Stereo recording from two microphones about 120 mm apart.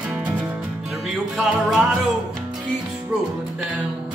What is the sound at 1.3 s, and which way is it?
Music, centre (ahead or behind).